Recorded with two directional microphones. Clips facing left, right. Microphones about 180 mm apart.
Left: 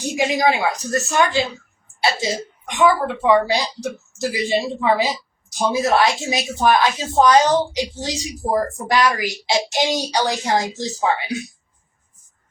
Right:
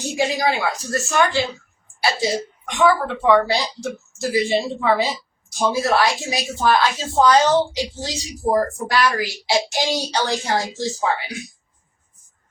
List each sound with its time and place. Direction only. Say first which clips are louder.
0.2 s a woman's voice: left 2 dB; 20° left (ahead or behind)